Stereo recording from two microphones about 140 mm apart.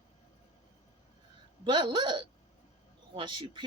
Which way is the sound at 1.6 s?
35° right (ahead or behind).